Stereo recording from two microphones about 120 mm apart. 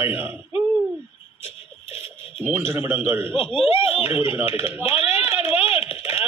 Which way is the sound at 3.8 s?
50° left (ahead or behind).